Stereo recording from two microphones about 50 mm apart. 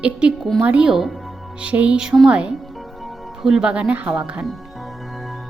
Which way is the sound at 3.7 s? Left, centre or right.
Right.